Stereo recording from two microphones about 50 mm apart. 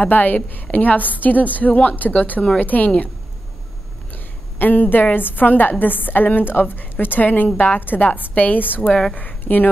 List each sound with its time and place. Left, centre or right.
0.0 s a woman's voice: left
4.1 s a woman's voice: left